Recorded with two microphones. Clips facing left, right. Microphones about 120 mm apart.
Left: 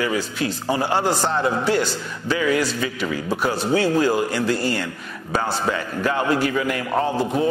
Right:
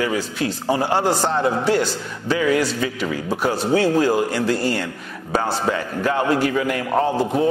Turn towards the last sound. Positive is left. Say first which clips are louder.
# right 2 dB
turn(degrees=-40)  # may be behind; listen again after turning